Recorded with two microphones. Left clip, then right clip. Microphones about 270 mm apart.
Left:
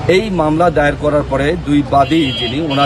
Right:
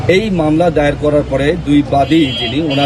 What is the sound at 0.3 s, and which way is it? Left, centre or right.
A man's voice, left.